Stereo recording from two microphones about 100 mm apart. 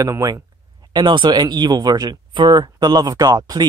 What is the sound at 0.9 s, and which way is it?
Speech, 50° right (ahead or behind).